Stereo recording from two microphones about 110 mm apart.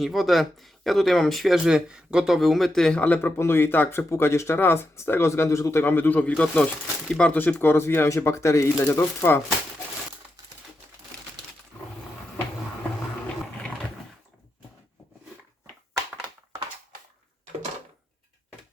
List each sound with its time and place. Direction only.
0.0 s speech: centre (ahead or behind); by 9.4 s 20° left (ahead or behind)
13.2 s dog: 15° left (ahead or behind)